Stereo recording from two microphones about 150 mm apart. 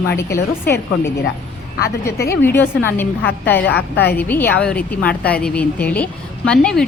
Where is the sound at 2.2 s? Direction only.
15° left (ahead or behind).